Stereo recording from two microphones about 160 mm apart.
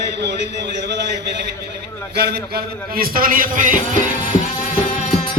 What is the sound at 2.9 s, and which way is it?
Speech, 65° right (ahead or behind).